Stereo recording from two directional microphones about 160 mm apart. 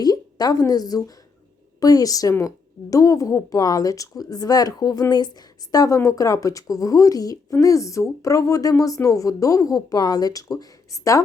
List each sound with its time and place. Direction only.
0.0 s a woman's voice: 25° left (ahead or behind)